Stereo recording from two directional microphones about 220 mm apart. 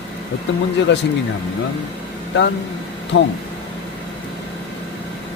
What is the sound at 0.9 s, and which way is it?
Speech, 50° left (ahead or behind).